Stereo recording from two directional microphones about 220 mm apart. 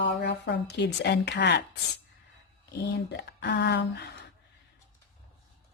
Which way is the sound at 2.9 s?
50° left (ahead or behind).